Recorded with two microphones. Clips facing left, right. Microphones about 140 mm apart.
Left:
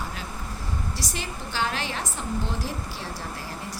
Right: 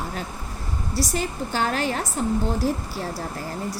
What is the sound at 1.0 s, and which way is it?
A woman's voice, 45° right (ahead or behind).